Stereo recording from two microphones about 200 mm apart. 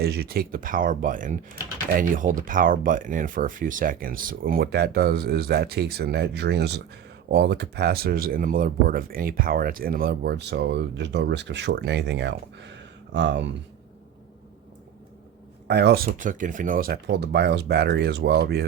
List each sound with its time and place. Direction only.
0.0 s speech: 50° right (ahead or behind)
15.6 s speech: 60° right (ahead or behind)